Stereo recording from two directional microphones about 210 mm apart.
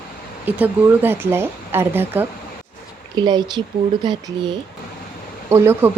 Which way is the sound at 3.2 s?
20° right (ahead or behind).